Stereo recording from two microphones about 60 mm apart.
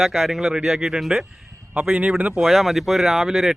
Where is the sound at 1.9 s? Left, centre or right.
Right.